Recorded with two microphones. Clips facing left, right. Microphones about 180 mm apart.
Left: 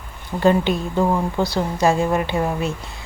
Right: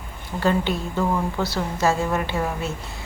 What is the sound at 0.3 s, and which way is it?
A woman's voice, 20° left (ahead or behind).